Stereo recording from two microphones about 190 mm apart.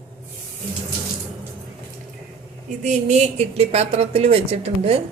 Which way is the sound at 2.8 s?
35° right (ahead or behind).